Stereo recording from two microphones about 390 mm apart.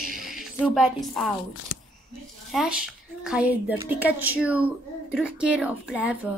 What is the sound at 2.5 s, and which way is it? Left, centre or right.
A woman's voice, centre.